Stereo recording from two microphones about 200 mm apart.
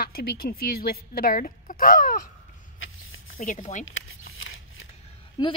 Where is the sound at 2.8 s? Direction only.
80° left.